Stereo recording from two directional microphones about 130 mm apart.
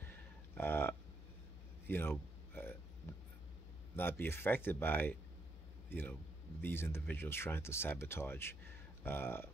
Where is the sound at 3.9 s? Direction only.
15° left (ahead or behind).